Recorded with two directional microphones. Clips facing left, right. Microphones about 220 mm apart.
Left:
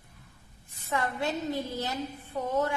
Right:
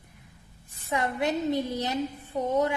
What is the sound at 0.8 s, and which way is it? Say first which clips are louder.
A woman's voice: right 3 dB; 15° right (ahead or behind).